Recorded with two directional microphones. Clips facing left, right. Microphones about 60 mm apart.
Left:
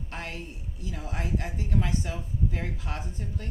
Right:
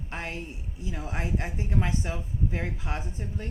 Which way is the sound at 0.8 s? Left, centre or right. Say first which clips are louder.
Right 2 dB; right.